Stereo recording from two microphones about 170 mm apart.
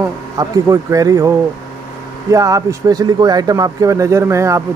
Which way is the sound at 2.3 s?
20° right (ahead or behind).